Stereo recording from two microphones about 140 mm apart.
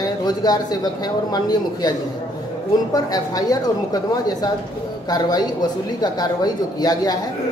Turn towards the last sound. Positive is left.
turn(degrees=25)  # may be behind; listen again after turning